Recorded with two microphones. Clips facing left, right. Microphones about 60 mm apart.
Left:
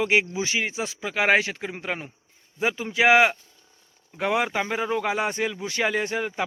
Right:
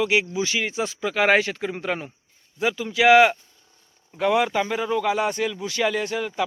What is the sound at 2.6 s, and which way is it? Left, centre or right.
Speech, left.